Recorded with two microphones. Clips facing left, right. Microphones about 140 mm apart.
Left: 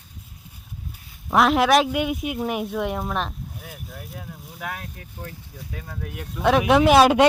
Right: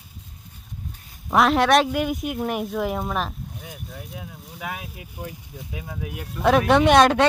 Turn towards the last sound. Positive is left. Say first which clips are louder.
# left 1 dB
turn(degrees=10)  # may be behind; listen again after turning